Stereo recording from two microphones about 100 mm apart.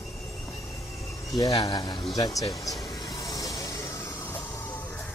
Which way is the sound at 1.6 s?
40° left (ahead or behind).